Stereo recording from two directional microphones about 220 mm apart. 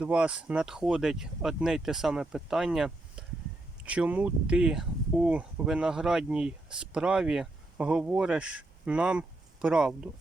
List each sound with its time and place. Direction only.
0.0 s speech: 5° right (ahead or behind)